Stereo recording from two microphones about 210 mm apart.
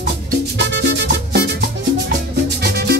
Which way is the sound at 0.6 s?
55° right (ahead or behind).